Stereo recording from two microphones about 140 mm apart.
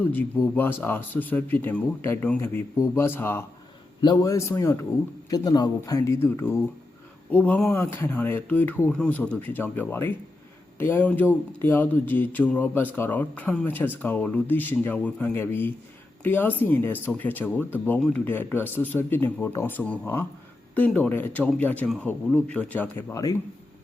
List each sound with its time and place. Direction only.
0.0 s speech: 15° left (ahead or behind)
4.0 s speech: 25° left (ahead or behind); by 23.0 s 10° left (ahead or behind)